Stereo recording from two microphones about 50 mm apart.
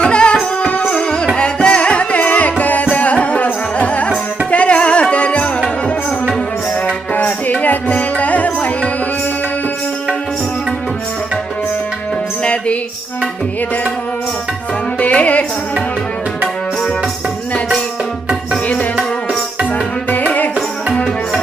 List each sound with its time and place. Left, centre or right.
0.0 s music: centre
0.9 s music: centre
7.1 s music: left
14.9 s music: left
18.5 s music: left
20.1 s music: left